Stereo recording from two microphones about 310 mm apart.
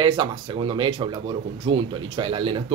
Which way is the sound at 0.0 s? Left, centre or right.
Centre.